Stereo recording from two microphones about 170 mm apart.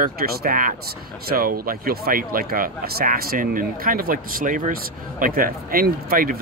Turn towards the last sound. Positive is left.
turn(degrees=-55)  # may be behind; listen again after turning